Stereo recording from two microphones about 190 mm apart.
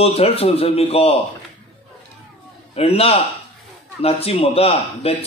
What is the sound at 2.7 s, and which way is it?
Speech, 30° left (ahead or behind).